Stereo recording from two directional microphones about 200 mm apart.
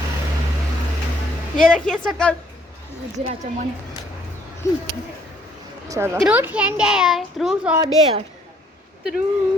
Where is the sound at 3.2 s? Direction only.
35° right (ahead or behind).